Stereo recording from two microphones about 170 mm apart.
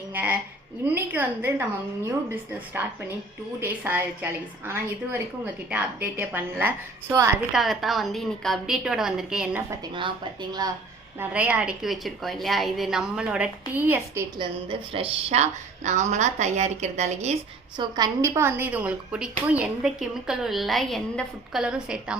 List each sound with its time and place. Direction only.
0.1 s a woman's voice: 10° right (ahead or behind)
7.5 s a woman's voice: centre (ahead or behind)
9.6 s a woman's voice: 30° right (ahead or behind)
11.2 s a woman's voice: 10° right (ahead or behind)
14.3 s a woman's voice: 30° right (ahead or behind)
17.7 s a woman's voice: 25° right (ahead or behind); by 22.2 s 5° right (ahead or behind)